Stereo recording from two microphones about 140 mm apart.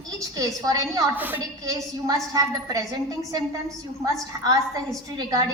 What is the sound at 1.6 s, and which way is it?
A woman's voice, 25° right (ahead or behind).